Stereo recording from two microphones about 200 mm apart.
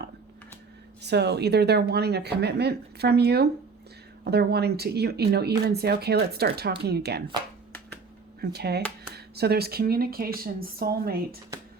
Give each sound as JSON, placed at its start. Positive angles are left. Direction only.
{"t": 1.0, "sound": "speech", "side_deg": -55}
{"t": 8.4, "sound": "speech", "side_deg": -55}